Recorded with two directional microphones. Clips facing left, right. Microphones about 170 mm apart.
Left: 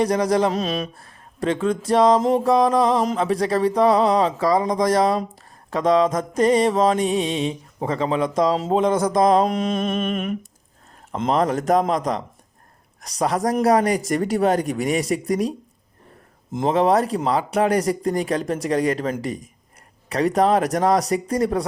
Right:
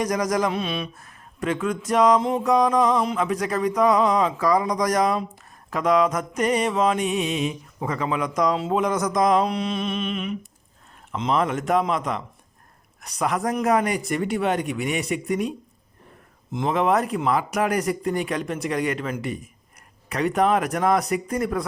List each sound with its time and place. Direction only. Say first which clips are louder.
0.0 s speech: left 4 dB; 30° left (ahead or behind)
8.8 s mantra: left 5 dB; 30° left (ahead or behind); by 10.3 s 50° left (ahead or behind)
11.1 s speech: left 3 dB; 40° left (ahead or behind)